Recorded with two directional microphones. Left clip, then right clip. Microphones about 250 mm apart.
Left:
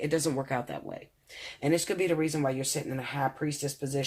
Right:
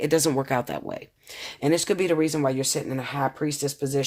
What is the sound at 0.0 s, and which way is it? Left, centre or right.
Speech, right.